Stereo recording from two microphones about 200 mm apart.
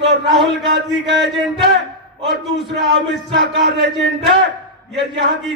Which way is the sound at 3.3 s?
60° right (ahead or behind).